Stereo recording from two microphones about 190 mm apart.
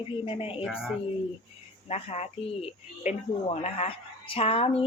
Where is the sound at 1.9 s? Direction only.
35° left (ahead or behind).